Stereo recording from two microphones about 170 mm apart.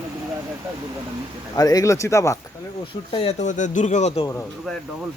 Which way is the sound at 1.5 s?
20° left (ahead or behind).